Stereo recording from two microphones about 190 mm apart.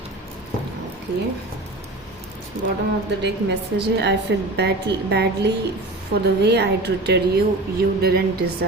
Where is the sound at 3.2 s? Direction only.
65° right (ahead or behind).